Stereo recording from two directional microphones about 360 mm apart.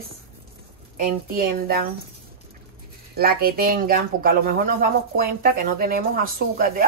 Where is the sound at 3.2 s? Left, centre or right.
Right.